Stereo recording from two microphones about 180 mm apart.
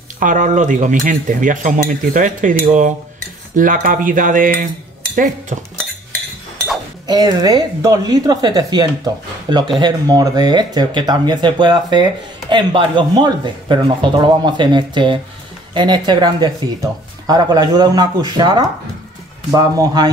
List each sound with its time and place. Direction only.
0.2 s speech: 45° right (ahead or behind)
7.1 s speech: 20° right (ahead or behind)